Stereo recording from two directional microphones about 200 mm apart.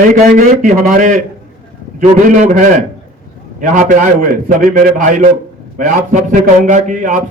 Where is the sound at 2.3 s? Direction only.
40° right (ahead or behind).